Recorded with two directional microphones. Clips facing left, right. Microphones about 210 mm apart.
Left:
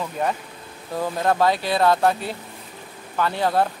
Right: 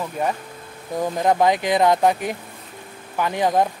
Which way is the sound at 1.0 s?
15° right (ahead or behind).